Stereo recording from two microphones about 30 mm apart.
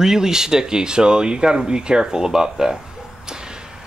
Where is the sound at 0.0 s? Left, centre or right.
Centre.